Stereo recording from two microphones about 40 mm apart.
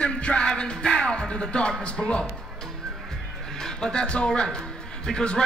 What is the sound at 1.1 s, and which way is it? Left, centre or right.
Music, centre.